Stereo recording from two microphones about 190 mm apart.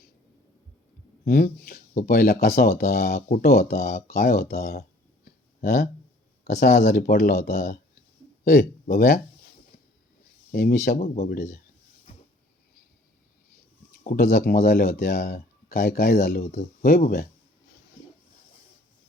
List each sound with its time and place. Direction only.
1.2 s speech: 55° left (ahead or behind)
3.8 s speech: 40° left (ahead or behind)
4.3 s a sound: 55° left (ahead or behind)
6.7 s speech: 55° left (ahead or behind)
8.4 s speech: 40° left (ahead or behind)
10.5 s speech: 50° left (ahead or behind)
11.2 s speech: 50° left (ahead or behind)
14.0 s speech: 45° left (ahead or behind)
16.4 s speech: 35° left (ahead or behind)
16.8 s speech: 50° left (ahead or behind)